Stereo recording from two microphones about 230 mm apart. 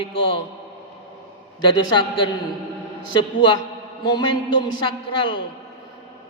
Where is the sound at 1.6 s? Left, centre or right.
Left.